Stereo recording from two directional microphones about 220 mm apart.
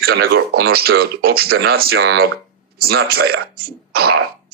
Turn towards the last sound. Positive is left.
turn(degrees=-45)  # may be behind; listen again after turning